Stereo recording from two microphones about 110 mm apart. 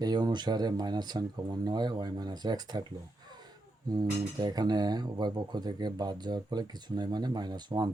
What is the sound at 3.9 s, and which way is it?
Speech, 40° right (ahead or behind).